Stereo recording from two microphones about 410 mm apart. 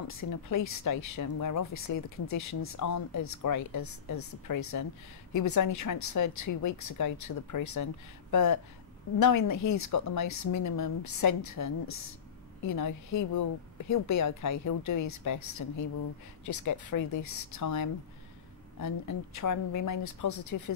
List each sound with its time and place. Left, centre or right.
0.1 s speech: left